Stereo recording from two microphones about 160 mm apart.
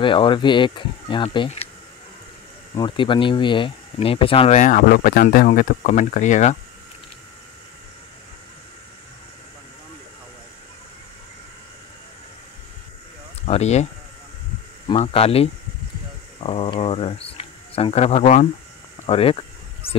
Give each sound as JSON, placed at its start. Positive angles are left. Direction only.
{"t": 0.0, "sound": "speech", "side_deg": 30}
{"t": 2.7, "sound": "speech", "side_deg": 30}
{"t": 13.5, "sound": "speech", "side_deg": 45}
{"t": 14.9, "sound": "speech", "side_deg": 35}